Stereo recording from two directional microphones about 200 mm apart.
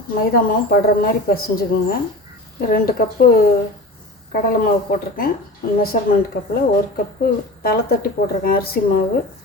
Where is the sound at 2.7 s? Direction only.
45° left (ahead or behind).